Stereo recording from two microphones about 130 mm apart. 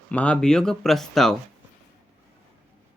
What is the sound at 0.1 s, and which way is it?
Speech, 10° left (ahead or behind).